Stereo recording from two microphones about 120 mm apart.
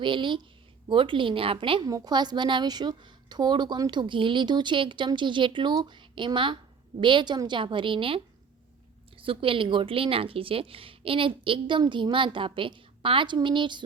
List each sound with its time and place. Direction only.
0.0 s speech: 45° right (ahead or behind)
1.8 s a woman's voice: 30° right (ahead or behind)